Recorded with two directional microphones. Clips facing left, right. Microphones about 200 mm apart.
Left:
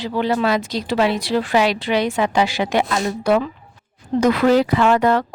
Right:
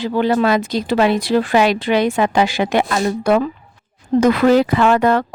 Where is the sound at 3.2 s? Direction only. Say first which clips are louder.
Right 2 dB; 50° right (ahead or behind).